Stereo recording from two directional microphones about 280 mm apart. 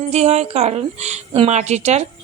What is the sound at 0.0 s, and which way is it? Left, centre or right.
A woman's voice, right.